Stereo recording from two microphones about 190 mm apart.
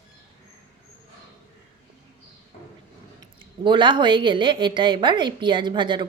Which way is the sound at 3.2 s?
25° right (ahead or behind).